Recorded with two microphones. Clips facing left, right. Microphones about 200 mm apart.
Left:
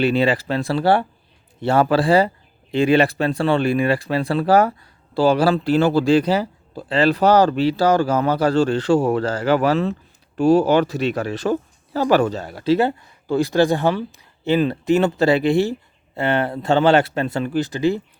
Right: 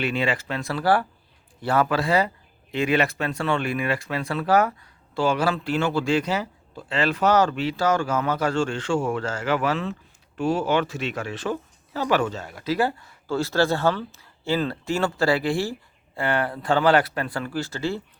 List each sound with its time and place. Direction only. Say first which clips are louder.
0.0 s speech: left 7 dB; 35° left (ahead or behind); by 18.0 s 15° left (ahead or behind)